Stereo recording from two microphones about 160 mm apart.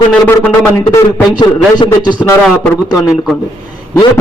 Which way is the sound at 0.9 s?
30° left (ahead or behind).